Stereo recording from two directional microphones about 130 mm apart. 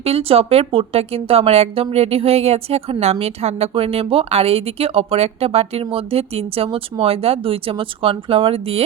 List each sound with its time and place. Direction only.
0.0 s speech: 50° right (ahead or behind)